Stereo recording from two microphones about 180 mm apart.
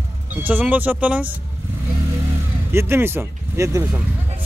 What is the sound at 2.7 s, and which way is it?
Speech, 15° right (ahead or behind).